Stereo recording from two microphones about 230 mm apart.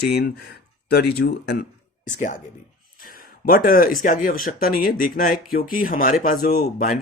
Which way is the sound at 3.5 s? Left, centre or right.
Left.